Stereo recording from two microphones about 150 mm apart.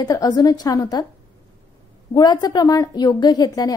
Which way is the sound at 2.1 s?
30° left (ahead or behind).